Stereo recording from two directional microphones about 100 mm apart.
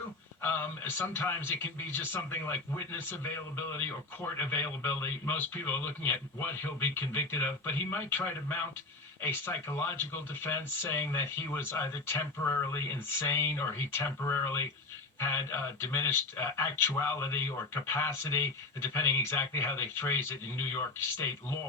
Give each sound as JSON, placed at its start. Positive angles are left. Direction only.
{"t": 0.4, "sound": "speech", "side_deg": 20}